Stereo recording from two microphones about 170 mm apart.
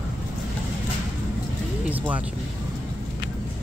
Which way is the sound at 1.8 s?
10° right (ahead or behind).